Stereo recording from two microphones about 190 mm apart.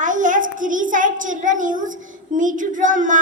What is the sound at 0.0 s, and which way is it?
A child's voice, 40° right (ahead or behind).